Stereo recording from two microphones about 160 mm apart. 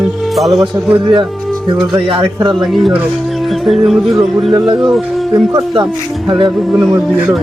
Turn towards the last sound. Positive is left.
turn(degrees=-5)  # may be behind; listen again after turning